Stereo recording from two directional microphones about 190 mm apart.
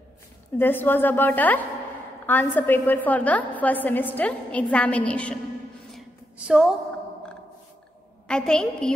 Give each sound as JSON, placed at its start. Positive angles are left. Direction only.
{"t": 0.6, "sound": "a woman's voice", "side_deg": 10}
{"t": 5.9, "sound": "a sound", "side_deg": 0}
{"t": 8.3, "sound": "a woman's voice", "side_deg": 5}